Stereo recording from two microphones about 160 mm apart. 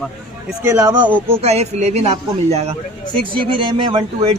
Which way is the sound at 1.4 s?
40° right (ahead or behind).